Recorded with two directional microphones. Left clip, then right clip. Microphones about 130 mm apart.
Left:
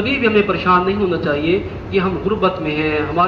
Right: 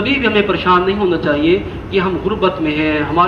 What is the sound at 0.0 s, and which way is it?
Speech, 30° right (ahead or behind).